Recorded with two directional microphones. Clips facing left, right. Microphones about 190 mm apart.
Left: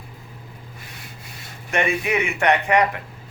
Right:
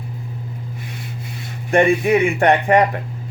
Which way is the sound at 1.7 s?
35° right (ahead or behind).